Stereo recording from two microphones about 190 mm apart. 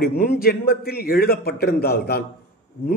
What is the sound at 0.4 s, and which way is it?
A man's voice, 55° left (ahead or behind).